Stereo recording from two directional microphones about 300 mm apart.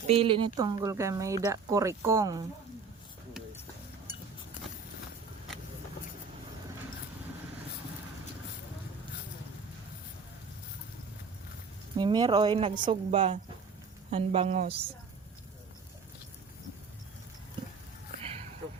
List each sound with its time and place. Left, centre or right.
0.1 s speech: centre
11.9 s speech: centre